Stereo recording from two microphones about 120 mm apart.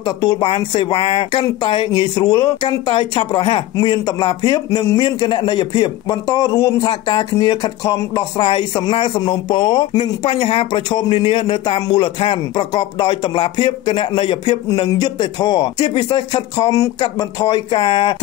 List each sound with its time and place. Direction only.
0.0 s a man's voice: 40° left (ahead or behind)
1.6 s a man's voice: 40° left (ahead or behind)